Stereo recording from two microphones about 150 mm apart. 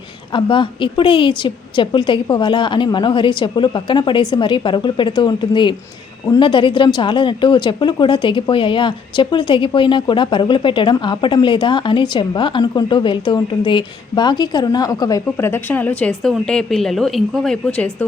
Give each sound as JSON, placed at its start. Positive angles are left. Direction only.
{"t": 0.3, "sound": "a woman's voice", "side_deg": 35}